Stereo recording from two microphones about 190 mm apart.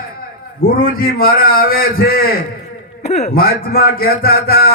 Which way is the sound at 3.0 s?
35° left (ahead or behind).